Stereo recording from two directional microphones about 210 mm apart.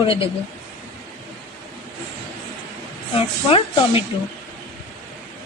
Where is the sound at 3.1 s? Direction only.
25° left (ahead or behind).